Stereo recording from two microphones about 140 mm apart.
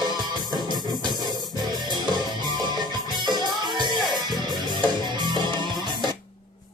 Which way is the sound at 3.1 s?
30° right (ahead or behind).